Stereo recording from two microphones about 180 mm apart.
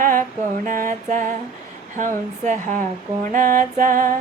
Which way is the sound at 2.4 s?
40° right (ahead or behind).